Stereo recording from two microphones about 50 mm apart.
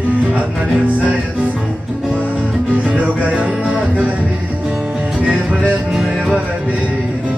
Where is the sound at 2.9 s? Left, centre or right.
Right.